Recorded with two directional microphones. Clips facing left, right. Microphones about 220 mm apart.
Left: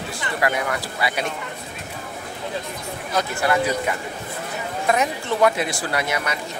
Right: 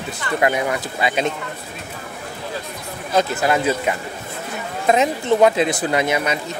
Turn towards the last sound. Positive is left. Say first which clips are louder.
# right 5 dB
turn(degrees=-20)  # may be behind; listen again after turning